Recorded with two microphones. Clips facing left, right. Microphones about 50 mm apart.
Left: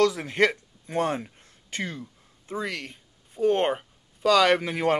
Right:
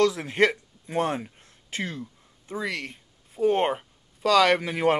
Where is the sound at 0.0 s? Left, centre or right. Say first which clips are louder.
Even; centre.